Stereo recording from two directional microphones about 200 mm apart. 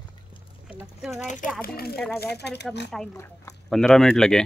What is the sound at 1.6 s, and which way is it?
Speech, 50° left (ahead or behind).